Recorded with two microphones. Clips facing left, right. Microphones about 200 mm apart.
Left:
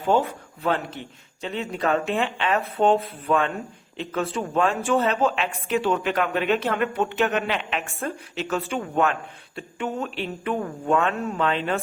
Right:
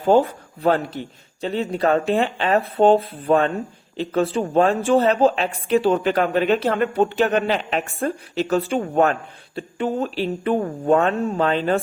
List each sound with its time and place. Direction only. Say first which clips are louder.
0.0 s speech: right 5 dB; 35° right (ahead or behind)